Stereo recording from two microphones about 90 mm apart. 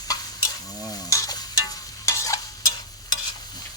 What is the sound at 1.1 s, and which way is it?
Stir, 40° left (ahead or behind).